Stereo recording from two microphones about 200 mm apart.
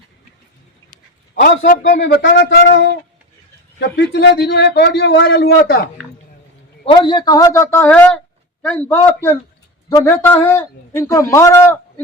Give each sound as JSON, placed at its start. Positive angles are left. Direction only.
{"t": 1.4, "sound": "a man's voice", "side_deg": 45}
{"t": 2.0, "sound": "a man's voice", "side_deg": 60}
{"t": 6.9, "sound": "a man's voice", "side_deg": 25}